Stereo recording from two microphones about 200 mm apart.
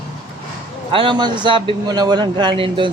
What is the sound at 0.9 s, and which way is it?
A man's voice, 25° right (ahead or behind).